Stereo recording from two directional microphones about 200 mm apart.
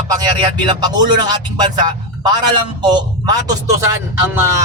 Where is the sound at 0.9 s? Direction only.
20° right (ahead or behind).